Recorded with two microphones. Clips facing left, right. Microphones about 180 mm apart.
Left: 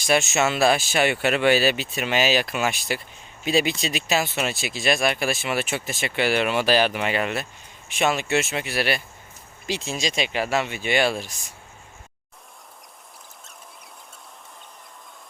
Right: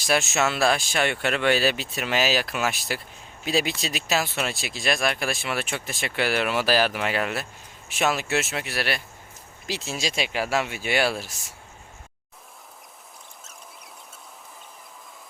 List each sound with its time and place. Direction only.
0.0 s speech: centre (ahead or behind)